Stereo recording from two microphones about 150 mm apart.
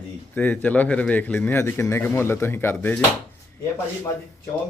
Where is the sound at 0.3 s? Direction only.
10° left (ahead or behind).